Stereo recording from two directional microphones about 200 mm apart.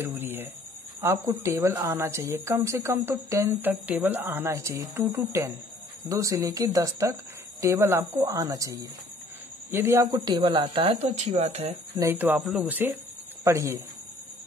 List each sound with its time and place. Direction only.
0.0 s a sound: 10° right (ahead or behind)
1.0 s speech: 10° right (ahead or behind); by 11.7 s 35° right (ahead or behind)
12.0 s speech: 10° right (ahead or behind)